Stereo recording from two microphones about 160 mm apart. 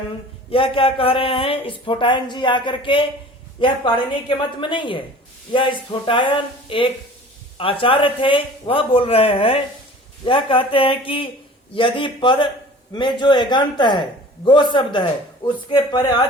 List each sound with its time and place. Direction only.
0.5 s a man's voice: 35° left (ahead or behind)